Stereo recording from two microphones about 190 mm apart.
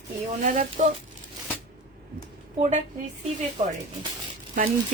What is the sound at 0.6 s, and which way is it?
Speech, 40° right (ahead or behind).